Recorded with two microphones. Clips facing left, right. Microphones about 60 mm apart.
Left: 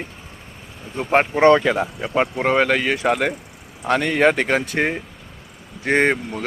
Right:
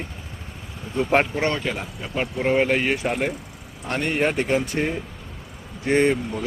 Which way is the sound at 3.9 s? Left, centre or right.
Left.